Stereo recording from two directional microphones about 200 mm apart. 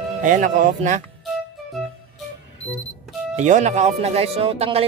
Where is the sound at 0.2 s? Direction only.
40° right (ahead or behind).